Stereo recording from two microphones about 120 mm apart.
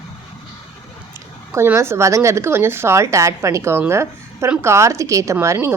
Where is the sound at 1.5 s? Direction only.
20° right (ahead or behind).